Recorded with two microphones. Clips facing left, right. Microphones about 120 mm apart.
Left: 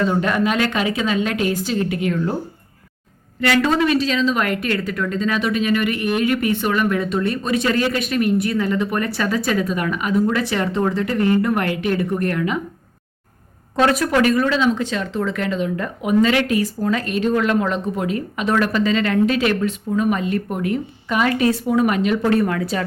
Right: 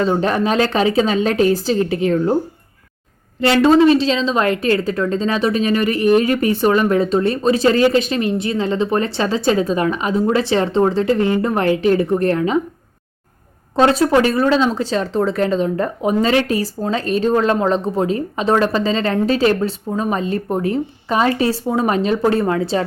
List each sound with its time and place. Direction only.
0.0 s speech: 30° right (ahead or behind)
3.4 s a woman's voice: 25° right (ahead or behind)
13.7 s speech: 30° right (ahead or behind)